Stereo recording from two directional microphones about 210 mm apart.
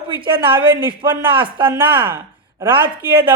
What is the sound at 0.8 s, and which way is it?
Speech, 20° right (ahead or behind).